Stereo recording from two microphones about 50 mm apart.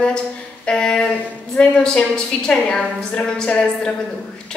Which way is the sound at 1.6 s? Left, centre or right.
Left.